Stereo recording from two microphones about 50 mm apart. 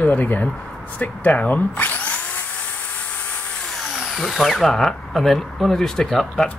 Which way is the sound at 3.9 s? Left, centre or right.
Centre.